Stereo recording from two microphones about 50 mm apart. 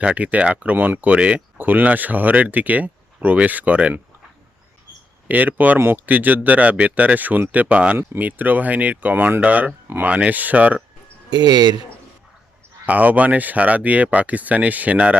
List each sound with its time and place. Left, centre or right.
0.0 s speech: right
1.5 s speech: right
5.3 s speech: right
12.8 s speech: right